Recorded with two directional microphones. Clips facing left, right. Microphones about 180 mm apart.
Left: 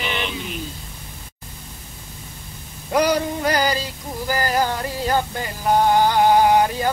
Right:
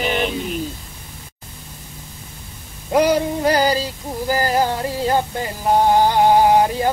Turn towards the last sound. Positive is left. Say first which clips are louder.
# right 2 dB
turn(degrees=-30)  # may be behind; listen again after turning